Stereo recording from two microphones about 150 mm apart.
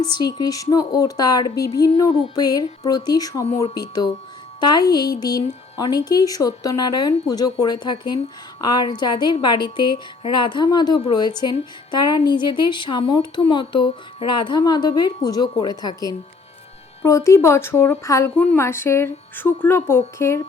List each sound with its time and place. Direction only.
0.0 s a woman's voice: 30° left (ahead or behind)